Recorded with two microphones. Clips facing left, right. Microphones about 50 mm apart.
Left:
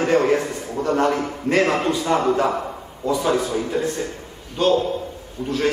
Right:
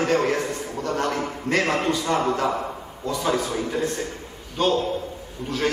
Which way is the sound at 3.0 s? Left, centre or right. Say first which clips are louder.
Left 4 dB; centre.